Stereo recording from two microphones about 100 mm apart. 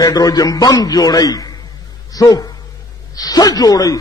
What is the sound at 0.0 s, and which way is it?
A man's voice, 40° left (ahead or behind).